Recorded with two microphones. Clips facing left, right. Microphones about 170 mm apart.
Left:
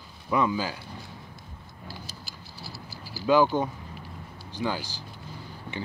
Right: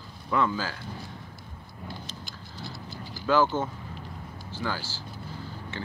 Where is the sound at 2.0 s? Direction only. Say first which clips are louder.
Right 2 dB; 10° left (ahead or behind).